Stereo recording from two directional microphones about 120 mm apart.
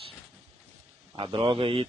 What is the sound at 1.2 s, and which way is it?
Speech, 45° right (ahead or behind).